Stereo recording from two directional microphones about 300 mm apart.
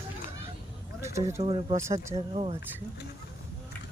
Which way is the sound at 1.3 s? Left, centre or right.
Centre.